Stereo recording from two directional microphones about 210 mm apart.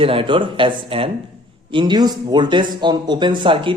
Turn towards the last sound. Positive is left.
turn(degrees=-25)  # may be behind; listen again after turning